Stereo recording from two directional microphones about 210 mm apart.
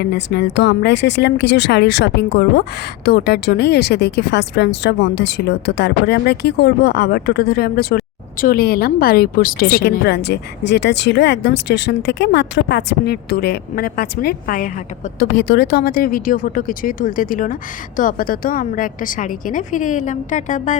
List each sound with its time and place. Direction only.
0.0 s speech: 50° left (ahead or behind); by 20.7 s 35° left (ahead or behind)